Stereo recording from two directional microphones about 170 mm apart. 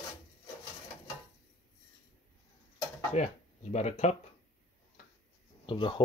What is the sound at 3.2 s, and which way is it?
Speech, 45° left (ahead or behind).